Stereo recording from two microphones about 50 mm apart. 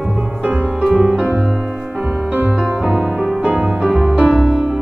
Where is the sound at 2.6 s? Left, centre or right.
Centre.